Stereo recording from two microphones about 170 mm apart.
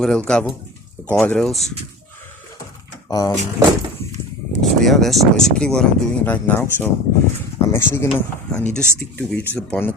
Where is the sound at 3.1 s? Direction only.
20° left (ahead or behind).